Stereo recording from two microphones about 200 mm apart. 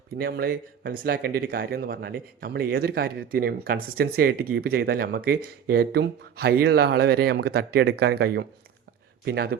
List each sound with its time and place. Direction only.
0.2 s speech: 50° right (ahead or behind)